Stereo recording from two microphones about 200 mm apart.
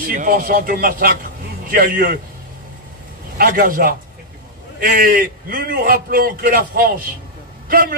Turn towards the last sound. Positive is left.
turn(degrees=-45)  # may be behind; listen again after turning